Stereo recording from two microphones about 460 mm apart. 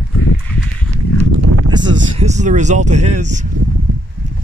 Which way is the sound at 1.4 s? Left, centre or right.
Right.